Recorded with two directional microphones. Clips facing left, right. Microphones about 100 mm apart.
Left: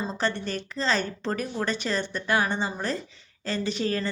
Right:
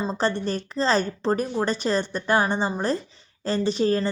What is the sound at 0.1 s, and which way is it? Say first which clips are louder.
A woman's voice: right 4 dB; 35° right (ahead or behind).